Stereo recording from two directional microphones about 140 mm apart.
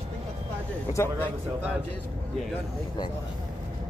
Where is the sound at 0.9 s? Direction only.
15° left (ahead or behind).